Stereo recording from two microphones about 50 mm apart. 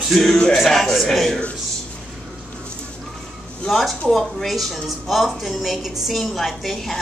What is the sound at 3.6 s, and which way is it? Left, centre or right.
A woman's voice, centre.